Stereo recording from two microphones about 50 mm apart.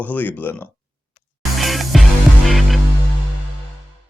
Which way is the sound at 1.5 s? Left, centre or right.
Centre.